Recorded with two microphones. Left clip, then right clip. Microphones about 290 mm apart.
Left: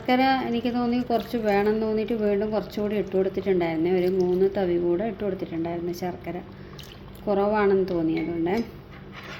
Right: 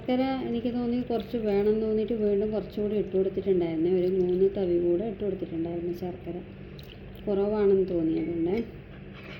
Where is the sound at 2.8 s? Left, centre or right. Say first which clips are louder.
Left 2 dB; left.